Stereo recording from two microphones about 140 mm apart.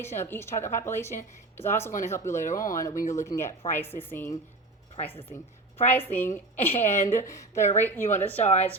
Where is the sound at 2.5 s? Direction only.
75° left (ahead or behind).